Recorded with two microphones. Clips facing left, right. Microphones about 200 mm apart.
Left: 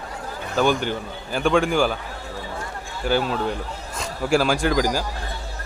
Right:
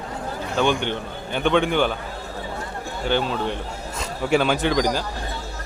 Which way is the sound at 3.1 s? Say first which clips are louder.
Left 1 dB; 5° left (ahead or behind).